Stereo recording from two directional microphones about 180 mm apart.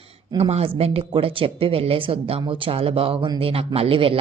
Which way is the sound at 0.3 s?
35° right (ahead or behind).